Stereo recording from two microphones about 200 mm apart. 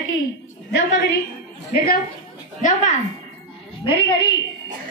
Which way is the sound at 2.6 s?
40° left (ahead or behind).